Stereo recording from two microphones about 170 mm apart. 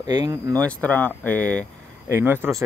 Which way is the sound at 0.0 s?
25° right (ahead or behind).